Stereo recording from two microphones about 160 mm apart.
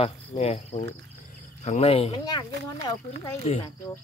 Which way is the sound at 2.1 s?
25° left (ahead or behind).